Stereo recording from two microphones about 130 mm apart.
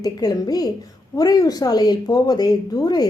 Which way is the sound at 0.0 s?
30° left (ahead or behind).